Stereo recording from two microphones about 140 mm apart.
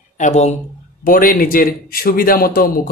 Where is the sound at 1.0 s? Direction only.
85° left.